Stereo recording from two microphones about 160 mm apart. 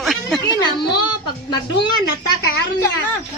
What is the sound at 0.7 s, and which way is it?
Speech, 30° left (ahead or behind).